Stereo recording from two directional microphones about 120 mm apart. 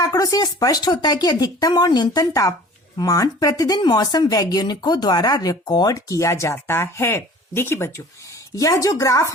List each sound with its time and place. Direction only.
0.0 s speech: 30° left (ahead or behind)